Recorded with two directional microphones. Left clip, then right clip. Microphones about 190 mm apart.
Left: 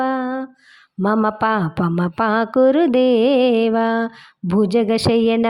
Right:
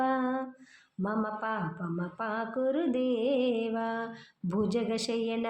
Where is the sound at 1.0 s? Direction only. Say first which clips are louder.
Left 15 dB; 55° left (ahead or behind).